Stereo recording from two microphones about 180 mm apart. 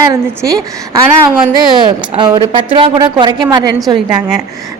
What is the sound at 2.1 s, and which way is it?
A woman's voice, 25° right (ahead or behind).